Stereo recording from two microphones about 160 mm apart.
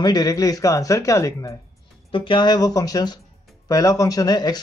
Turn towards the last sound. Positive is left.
turn(degrees=25)  # may be behind; listen again after turning